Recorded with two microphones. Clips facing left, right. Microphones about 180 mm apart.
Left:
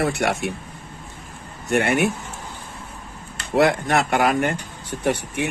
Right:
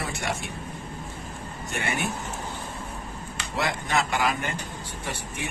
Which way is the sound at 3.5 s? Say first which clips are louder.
Left 9 dB; 60° left (ahead or behind).